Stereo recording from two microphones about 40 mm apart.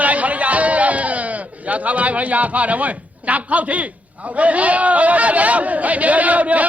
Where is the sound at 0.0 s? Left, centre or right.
Right.